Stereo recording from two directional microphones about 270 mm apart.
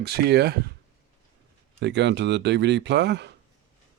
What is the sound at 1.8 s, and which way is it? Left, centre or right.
Speech, right.